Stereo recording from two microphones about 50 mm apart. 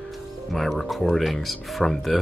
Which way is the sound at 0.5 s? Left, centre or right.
Centre.